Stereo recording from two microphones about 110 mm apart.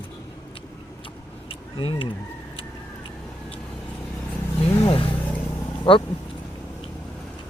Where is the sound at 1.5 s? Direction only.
50° left (ahead or behind).